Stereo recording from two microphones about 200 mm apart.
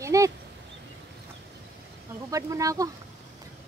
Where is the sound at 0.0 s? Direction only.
15° right (ahead or behind).